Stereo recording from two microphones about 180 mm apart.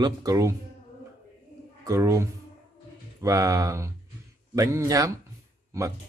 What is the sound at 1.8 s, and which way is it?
Speech, 15° right (ahead or behind).